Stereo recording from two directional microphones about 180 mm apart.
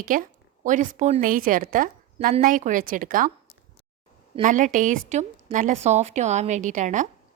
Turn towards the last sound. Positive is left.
turn(degrees=-45)  # may be behind; listen again after turning